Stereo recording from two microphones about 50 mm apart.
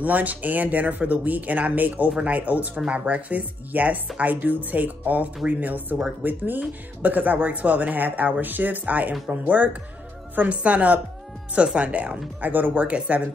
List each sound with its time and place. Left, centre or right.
0.0 s speech: right
12.8 s speech: right